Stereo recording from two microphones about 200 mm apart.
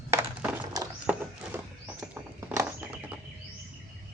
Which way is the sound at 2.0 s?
10° right (ahead or behind).